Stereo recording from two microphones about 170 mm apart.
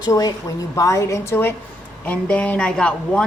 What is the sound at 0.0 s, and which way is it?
A woman's voice, 20° left (ahead or behind).